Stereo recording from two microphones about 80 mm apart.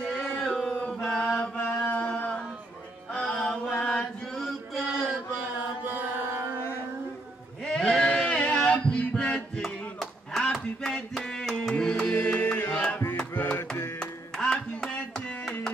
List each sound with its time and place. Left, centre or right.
0.6 s chant: centre
3.1 s music: centre
3.8 s chant: centre
5.9 s chant: right
7.6 s a sound: centre
10.4 s music: centre; by 13.7 s left
13.9 s music: centre